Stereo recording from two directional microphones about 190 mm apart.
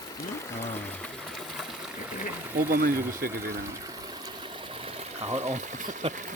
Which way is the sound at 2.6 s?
50° right (ahead or behind).